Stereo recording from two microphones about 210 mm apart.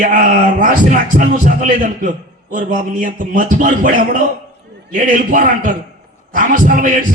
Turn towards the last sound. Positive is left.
turn(degrees=-40)  # may be behind; listen again after turning